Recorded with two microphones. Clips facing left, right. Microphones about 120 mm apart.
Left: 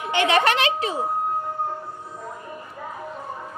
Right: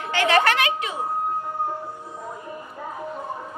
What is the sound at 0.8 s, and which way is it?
Speech, 35° left (ahead or behind).